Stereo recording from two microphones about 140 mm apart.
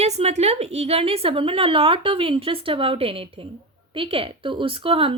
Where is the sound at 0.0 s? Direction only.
50° right (ahead or behind).